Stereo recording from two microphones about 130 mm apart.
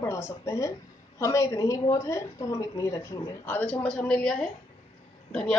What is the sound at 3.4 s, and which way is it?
A woman's voice, 15° left (ahead or behind).